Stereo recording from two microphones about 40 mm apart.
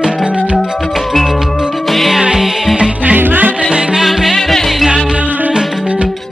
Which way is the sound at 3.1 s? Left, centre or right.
Right.